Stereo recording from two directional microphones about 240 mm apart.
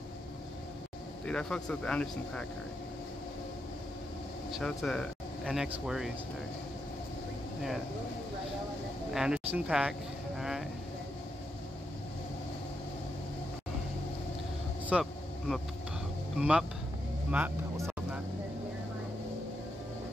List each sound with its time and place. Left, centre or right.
1.2 s speech: centre
4.5 s speech: centre
9.1 s speech: centre
14.9 s vehicle: centre
16.3 s speech: centre
17.3 s vehicle: centre